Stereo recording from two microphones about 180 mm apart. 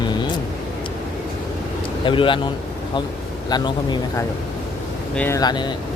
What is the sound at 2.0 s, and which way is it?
Speech, 30° left (ahead or behind).